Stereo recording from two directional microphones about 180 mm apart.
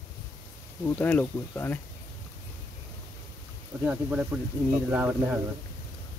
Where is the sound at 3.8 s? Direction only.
5° right (ahead or behind).